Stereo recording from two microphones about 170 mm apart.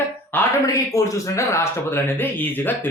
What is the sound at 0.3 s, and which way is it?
Speech, 15° left (ahead or behind).